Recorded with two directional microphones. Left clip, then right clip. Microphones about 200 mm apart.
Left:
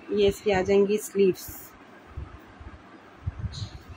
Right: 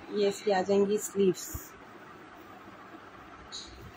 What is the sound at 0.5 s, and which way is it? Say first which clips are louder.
A woman's voice: left 2 dB; 35° left (ahead or behind).